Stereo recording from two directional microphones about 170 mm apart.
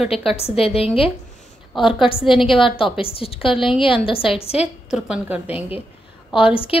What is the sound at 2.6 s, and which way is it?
A woman's voice, 30° left (ahead or behind).